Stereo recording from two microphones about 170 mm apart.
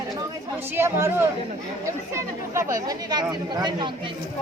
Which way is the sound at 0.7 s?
15° right (ahead or behind).